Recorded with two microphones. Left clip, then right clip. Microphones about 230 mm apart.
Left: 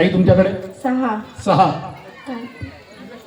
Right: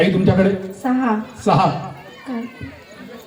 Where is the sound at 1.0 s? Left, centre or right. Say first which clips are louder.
Right 1 dB; left.